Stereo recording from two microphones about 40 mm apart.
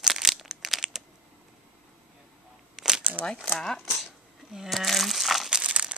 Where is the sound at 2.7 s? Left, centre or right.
Centre.